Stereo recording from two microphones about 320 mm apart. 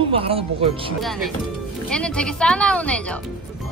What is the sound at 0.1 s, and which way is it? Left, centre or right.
Speech, centre.